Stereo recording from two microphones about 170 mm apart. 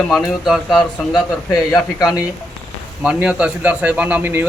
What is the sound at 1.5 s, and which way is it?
Speech, 20° left (ahead or behind).